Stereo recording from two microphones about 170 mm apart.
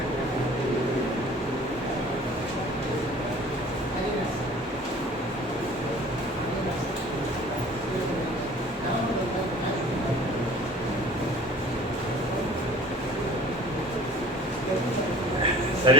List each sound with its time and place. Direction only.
15.9 s speech: 30° right (ahead or behind)